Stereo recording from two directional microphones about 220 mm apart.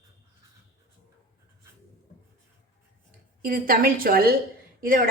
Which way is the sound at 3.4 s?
40° right (ahead or behind).